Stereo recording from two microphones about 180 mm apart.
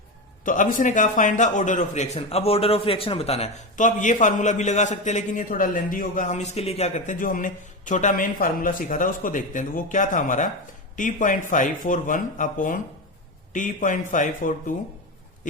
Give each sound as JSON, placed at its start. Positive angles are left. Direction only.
{"t": 0.4, "sound": "a man's voice", "side_deg": 45}